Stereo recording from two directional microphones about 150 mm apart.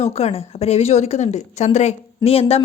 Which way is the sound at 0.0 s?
45° left (ahead or behind).